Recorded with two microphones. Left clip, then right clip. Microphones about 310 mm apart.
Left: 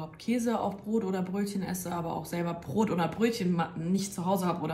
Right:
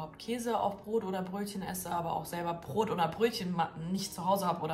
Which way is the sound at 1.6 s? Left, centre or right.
Right.